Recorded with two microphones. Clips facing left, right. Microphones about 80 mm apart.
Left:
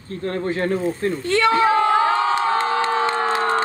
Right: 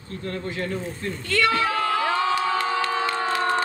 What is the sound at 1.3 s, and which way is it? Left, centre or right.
Crowd, left.